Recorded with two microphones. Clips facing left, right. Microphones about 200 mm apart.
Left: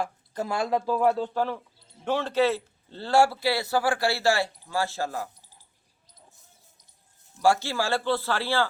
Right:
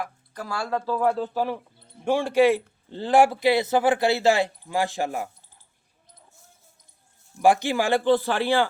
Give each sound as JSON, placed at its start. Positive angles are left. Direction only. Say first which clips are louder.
{"t": 0.0, "sound": "speech", "louder": "left 4 dB", "side_deg": 25}
{"t": 1.3, "sound": "a man's voice", "louder": "right 1 dB", "side_deg": -10}
{"t": 7.3, "sound": "a man's voice", "louder": "right 3 dB", "side_deg": -15}